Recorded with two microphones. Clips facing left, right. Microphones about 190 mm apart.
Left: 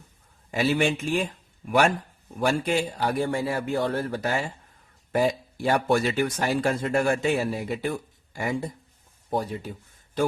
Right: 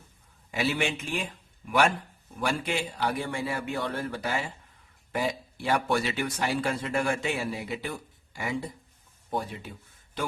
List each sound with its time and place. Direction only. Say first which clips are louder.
0.5 s a man's voice: left 5 dB; 40° left (ahead or behind)